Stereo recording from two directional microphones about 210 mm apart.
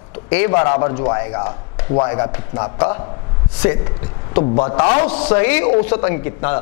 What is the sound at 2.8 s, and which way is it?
Speech, 10° left (ahead or behind).